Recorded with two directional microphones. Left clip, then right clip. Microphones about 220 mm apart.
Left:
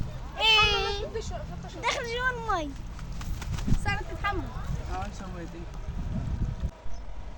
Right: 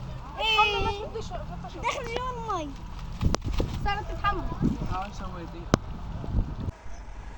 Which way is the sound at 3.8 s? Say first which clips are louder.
Right 2 dB; 10° left (ahead or behind).